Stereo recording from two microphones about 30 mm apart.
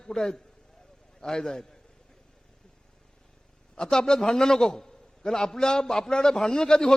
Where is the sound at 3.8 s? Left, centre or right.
Left.